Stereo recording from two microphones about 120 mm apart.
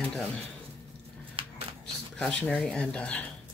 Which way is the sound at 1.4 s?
45° right (ahead or behind).